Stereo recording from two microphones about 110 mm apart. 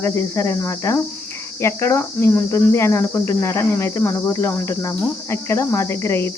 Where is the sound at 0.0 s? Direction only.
25° left (ahead or behind).